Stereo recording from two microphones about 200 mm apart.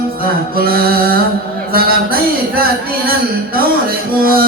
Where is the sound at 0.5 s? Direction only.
45° right (ahead or behind).